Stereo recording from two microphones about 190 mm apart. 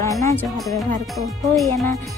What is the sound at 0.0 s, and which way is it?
Music, 15° left (ahead or behind).